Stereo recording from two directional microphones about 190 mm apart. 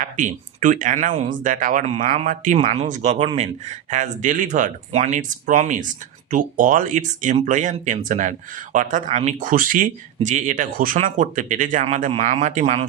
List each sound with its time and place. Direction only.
0.0 s speech: 40° right (ahead or behind)